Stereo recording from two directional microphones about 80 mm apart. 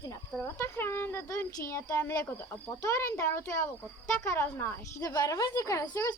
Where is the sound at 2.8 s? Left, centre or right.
Left.